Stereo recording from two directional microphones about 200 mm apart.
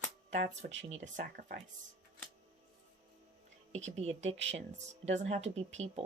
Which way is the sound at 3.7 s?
35° right (ahead or behind).